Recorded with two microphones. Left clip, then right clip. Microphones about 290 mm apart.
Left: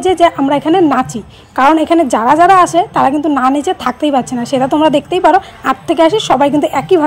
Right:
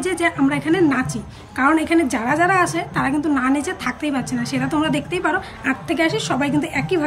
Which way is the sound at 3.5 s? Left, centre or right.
Centre.